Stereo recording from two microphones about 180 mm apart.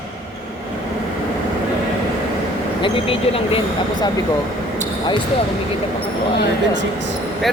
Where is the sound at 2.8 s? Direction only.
30° left (ahead or behind).